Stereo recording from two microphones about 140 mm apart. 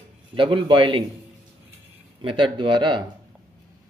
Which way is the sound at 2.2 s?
35° right (ahead or behind).